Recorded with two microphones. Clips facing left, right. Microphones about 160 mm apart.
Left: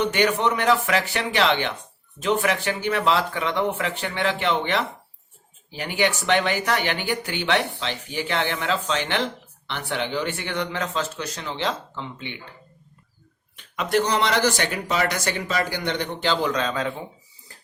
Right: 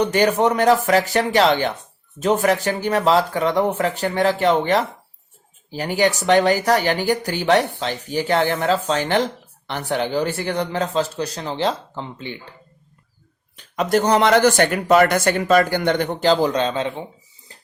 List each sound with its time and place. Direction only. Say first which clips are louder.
0.0 s speech: right 4 dB; 40° right (ahead or behind)
13.6 s speech: right 4 dB; 40° right (ahead or behind)
17.5 s dishes: right 3 dB; 20° right (ahead or behind)